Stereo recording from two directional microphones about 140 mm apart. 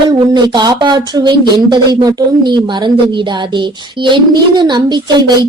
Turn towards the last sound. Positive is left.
turn(degrees=-30)  # may be behind; listen again after turning